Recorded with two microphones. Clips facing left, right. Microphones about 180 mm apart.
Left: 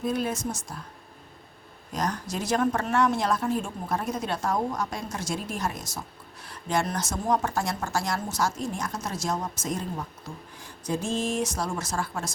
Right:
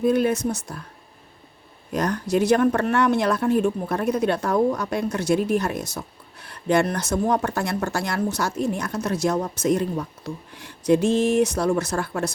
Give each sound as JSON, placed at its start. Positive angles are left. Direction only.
{"t": 0.0, "sound": "speech", "side_deg": -65}
{"t": 1.9, "sound": "speech", "side_deg": -60}